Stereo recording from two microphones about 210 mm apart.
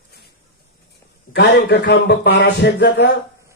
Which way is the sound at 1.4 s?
50° left (ahead or behind).